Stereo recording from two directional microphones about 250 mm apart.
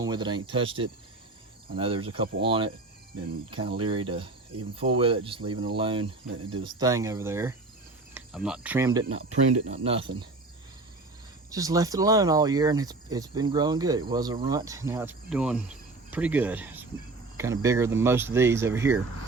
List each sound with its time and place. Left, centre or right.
0.0 s speech: centre
11.5 s speech: centre